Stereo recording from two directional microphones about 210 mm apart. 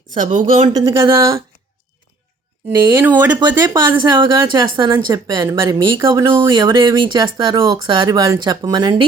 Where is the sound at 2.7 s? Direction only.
10° right (ahead or behind).